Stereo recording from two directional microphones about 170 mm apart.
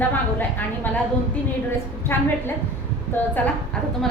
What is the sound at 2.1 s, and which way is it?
Speech, 15° left (ahead or behind).